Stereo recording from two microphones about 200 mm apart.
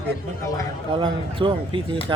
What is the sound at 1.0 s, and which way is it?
Speech, 25° right (ahead or behind).